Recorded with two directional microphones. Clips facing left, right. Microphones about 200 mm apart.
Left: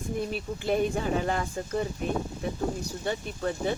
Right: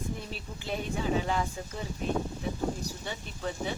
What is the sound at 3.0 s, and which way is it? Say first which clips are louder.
Speech: left 8 dB; 50° left (ahead or behind).